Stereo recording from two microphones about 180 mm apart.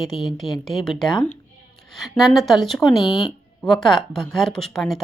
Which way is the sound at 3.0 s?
30° left (ahead or behind).